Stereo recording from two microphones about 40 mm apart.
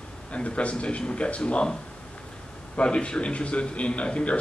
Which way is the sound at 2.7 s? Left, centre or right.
Left.